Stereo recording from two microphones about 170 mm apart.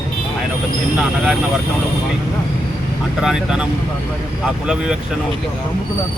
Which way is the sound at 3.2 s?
5° right (ahead or behind).